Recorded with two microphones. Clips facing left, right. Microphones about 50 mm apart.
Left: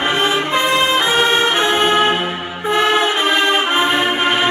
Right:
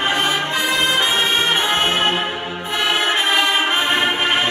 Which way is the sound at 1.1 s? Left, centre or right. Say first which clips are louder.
Left 4 dB; left.